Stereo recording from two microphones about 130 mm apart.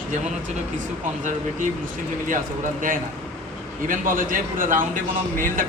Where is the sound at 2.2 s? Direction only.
90° right.